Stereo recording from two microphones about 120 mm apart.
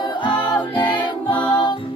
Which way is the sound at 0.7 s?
40° left (ahead or behind).